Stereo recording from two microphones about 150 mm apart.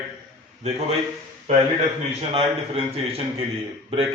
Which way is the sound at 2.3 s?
40° right (ahead or behind).